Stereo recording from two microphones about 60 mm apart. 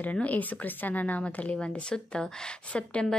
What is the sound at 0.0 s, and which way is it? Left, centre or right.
A woman's voice, left.